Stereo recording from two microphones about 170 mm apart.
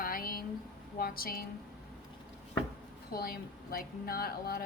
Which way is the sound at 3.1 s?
60° left (ahead or behind).